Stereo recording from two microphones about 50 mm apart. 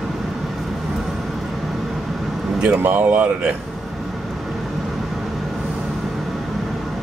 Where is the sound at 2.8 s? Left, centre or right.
Right.